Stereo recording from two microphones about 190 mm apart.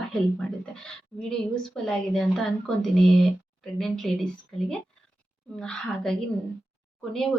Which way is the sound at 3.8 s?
Centre (ahead or behind).